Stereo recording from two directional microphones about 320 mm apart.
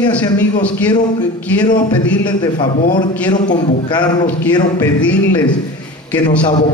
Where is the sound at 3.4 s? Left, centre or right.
Left.